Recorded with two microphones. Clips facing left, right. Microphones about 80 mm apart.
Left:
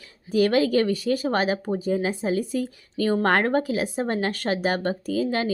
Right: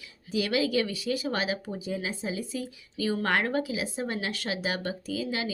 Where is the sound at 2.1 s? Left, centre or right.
Left.